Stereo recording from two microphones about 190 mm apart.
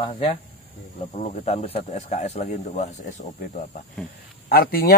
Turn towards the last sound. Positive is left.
turn(degrees=50)  # may be behind; listen again after turning